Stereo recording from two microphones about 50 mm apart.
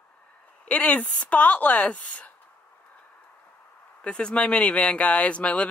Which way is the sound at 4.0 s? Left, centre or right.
Left.